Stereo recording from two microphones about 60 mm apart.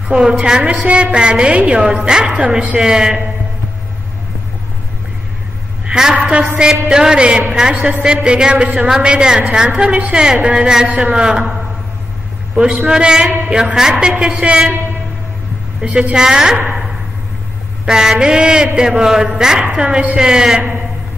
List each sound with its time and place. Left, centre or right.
0.1 s a woman's voice: centre
5.9 s a sound: centre
6.1 s a woman's voice: right
12.5 s a woman's voice: centre
15.8 s a woman's voice: centre
17.8 s a woman's voice: centre